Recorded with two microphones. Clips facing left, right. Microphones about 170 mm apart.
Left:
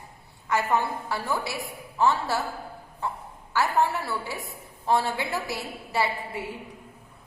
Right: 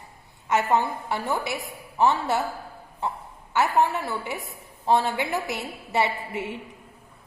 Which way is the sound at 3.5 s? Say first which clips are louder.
Right 2 dB; 20° right (ahead or behind).